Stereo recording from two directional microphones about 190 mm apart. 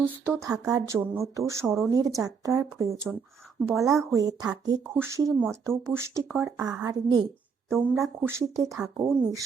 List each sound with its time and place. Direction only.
0.0 s speech: 15° right (ahead or behind)